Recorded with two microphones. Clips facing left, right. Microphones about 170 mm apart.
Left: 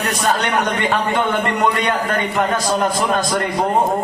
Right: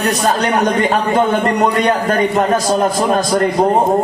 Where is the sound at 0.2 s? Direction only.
35° right (ahead or behind).